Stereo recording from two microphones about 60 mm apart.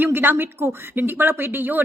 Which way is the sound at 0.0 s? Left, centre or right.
Right.